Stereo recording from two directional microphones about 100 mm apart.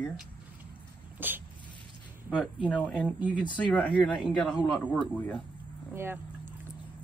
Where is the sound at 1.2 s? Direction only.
20° right (ahead or behind).